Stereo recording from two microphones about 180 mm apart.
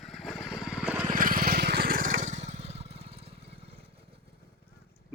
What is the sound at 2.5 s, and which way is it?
Lawn mower, 35° right (ahead or behind).